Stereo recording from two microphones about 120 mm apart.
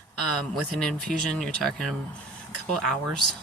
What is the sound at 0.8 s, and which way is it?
Speech, 5° left (ahead or behind).